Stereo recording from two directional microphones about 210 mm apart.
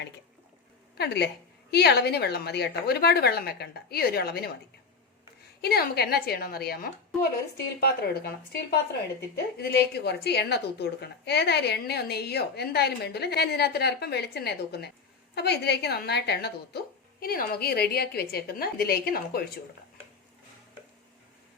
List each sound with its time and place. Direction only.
0.9 s a woman's voice: 50° left (ahead or behind)
5.6 s a woman's voice: 50° left (ahead or behind)
9.6 s a woman's voice: 50° left (ahead or behind)